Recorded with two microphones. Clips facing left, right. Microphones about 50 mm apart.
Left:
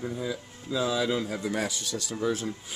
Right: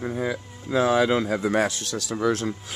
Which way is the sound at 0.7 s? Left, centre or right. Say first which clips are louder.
Right 7 dB; right.